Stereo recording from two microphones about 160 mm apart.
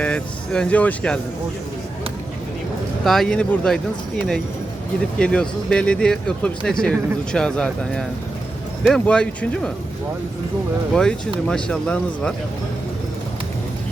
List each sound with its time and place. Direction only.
0.0 s speech: 5° left (ahead or behind)
3.0 s speech: centre (ahead or behind)
4.9 s speech: 5° left (ahead or behind)
10.9 s speech: 5° left (ahead or behind)